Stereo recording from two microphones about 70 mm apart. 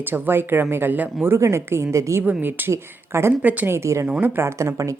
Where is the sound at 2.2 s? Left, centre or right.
Right.